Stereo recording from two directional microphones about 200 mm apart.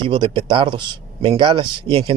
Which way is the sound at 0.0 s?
25° right (ahead or behind).